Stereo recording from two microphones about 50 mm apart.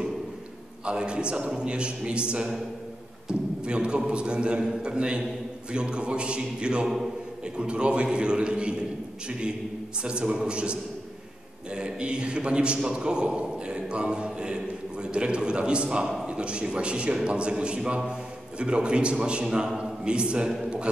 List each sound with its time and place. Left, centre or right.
0.8 s a man's voice: centre